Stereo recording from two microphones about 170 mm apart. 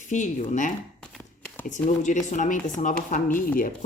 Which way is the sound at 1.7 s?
45° left (ahead or behind).